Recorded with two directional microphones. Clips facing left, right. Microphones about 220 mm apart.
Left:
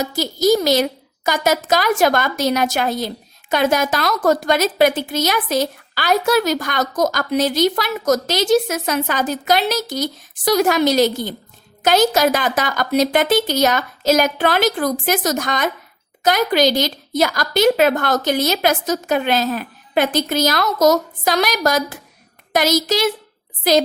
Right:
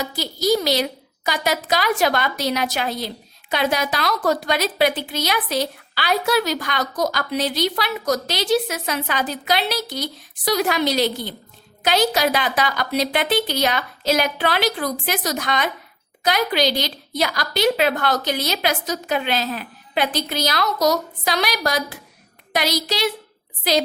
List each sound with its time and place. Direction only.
0.0 s a woman's voice: 45° left (ahead or behind)